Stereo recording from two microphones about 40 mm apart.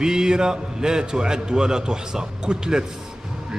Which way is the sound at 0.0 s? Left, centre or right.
Centre.